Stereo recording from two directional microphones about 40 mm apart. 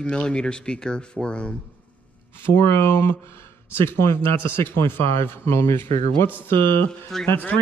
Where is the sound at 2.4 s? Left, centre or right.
Left.